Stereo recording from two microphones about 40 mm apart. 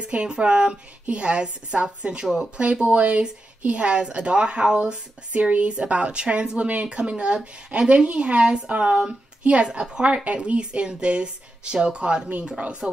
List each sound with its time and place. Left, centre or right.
0.0 s a woman's voice: right
5.3 s a woman's voice: right